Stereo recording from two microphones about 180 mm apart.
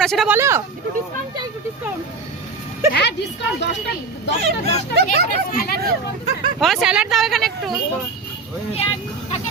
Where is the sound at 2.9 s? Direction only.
65° left (ahead or behind).